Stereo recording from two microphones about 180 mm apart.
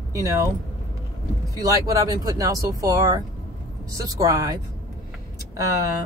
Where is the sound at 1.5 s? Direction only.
20° right (ahead or behind).